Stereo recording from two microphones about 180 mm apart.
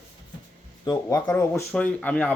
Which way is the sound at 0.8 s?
20° left (ahead or behind).